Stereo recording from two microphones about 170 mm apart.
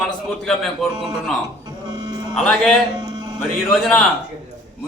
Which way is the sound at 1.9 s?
25° right (ahead or behind).